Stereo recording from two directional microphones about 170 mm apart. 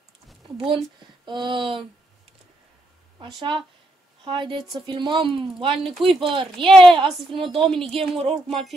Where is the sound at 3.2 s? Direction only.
30° right (ahead or behind).